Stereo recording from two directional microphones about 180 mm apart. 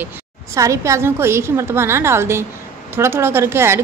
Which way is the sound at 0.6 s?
15° right (ahead or behind).